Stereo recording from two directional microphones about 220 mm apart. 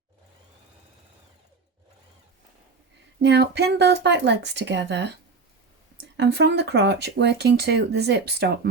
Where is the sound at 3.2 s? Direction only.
50° right (ahead or behind).